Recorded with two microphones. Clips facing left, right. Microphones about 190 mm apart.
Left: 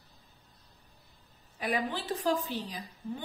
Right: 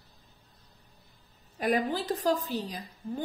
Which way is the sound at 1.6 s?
45° right (ahead or behind).